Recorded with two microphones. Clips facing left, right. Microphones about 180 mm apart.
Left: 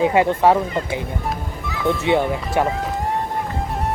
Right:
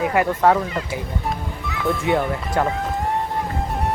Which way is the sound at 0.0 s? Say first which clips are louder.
Left 3 dB; 25° left (ahead or behind).